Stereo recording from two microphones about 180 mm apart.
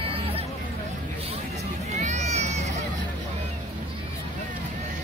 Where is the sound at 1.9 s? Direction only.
40° right (ahead or behind).